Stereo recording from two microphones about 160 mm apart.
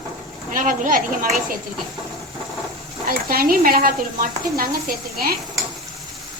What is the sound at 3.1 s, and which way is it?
Speech, 65° right (ahead or behind).